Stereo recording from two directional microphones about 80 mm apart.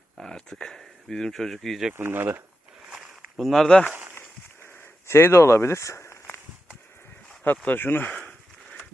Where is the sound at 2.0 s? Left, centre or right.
Right.